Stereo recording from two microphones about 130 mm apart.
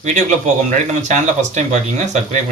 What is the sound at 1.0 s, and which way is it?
Speech, 70° right (ahead or behind).